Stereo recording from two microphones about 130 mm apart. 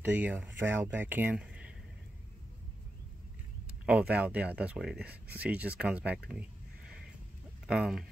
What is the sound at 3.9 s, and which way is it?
Speech, 10° right (ahead or behind).